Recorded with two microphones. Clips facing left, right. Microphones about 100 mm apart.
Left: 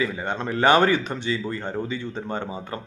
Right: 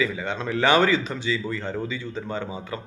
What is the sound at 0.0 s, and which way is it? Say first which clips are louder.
Speech: even; 50° left (ahead or behind).